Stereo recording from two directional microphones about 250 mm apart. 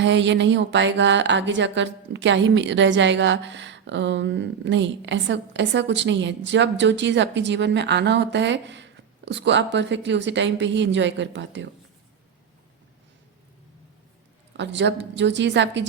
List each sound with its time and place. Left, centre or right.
0.0 s speech: right
14.5 s speech: right